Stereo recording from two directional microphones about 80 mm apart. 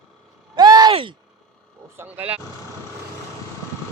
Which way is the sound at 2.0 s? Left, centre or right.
Right.